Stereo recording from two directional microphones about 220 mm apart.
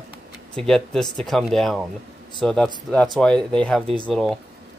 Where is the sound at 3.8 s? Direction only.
25° right (ahead or behind).